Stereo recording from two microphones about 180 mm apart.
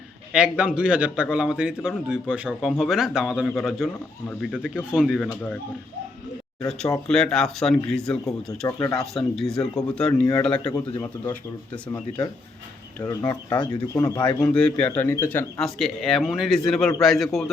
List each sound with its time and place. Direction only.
0.3 s a man's voice: 5° right (ahead or behind)
7.1 s a man's voice: 5° left (ahead or behind)
8.6 s speech: 15° left (ahead or behind)
9.0 s a man's voice: centre (ahead or behind)
10.6 s speech: 25° left (ahead or behind)
13.0 s speech: 20° left (ahead or behind)
14.4 s speech: 5° left (ahead or behind)
15.6 s a man's voice: centre (ahead or behind)